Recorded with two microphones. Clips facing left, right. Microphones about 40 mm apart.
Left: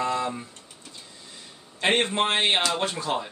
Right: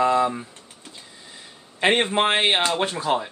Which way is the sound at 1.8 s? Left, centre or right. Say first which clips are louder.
Right 3 dB; centre.